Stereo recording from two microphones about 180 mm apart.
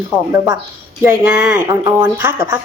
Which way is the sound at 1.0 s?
10° right (ahead or behind).